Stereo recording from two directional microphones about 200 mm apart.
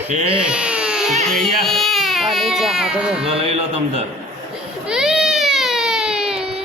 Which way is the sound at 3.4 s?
30° right (ahead or behind).